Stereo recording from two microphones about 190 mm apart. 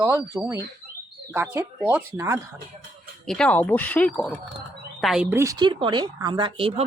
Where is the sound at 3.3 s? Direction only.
5° left (ahead or behind).